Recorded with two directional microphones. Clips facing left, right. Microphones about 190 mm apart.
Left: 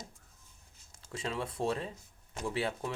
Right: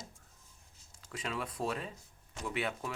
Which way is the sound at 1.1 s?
25° left (ahead or behind).